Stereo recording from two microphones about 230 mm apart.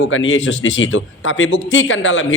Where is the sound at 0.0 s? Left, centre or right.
Left.